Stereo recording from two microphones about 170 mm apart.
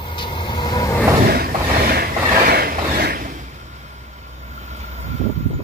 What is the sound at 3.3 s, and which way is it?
Vehicle, 45° right (ahead or behind).